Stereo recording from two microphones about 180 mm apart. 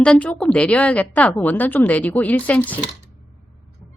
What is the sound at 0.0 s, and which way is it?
A woman's voice, 5° left (ahead or behind).